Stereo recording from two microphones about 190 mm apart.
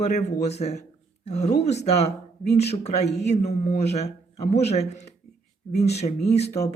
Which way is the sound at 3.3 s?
35° left (ahead or behind).